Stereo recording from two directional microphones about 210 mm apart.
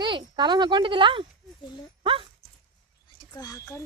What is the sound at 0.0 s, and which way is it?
Speech, 20° right (ahead or behind).